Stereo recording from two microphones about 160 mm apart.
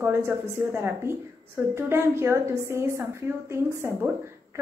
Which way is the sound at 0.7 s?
15° right (ahead or behind).